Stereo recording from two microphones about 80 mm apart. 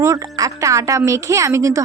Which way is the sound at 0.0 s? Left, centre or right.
Right.